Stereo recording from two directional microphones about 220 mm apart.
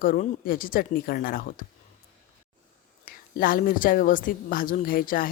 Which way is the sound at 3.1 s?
40° left (ahead or behind).